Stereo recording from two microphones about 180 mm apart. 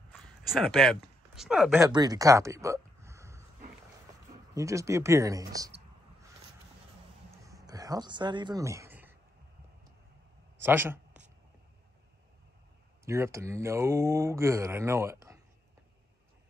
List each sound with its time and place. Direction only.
0.5 s speech: centre (ahead or behind)
1.8 s speech: 20° right (ahead or behind)
4.6 s speech: 15° right (ahead or behind)
7.2 s a sound: 20° right (ahead or behind)
10.6 s a sound: 10° right (ahead or behind)
13.0 s speech: 15° right (ahead or behind)